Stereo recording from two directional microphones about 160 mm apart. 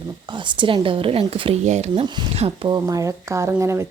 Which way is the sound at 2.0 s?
30° right (ahead or behind).